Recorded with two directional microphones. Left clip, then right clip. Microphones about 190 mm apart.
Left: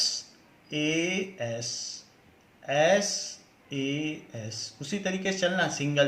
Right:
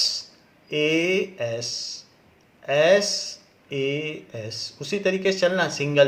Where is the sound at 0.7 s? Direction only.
35° right (ahead or behind).